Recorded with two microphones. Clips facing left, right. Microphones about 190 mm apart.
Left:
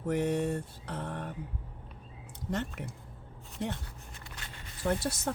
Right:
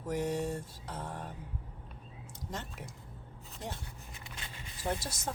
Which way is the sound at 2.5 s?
65° left (ahead or behind).